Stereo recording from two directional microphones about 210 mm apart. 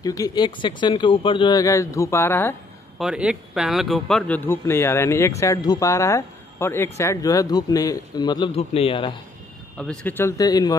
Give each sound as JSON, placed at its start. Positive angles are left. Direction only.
{"t": 0.0, "sound": "speech", "side_deg": 15}
{"t": 3.0, "sound": "speech", "side_deg": -5}
{"t": 9.8, "sound": "speech", "side_deg": 5}